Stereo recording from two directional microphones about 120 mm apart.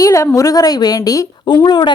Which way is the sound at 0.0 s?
25° left (ahead or behind).